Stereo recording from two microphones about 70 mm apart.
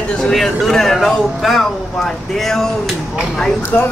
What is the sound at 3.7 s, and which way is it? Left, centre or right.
Speech, left.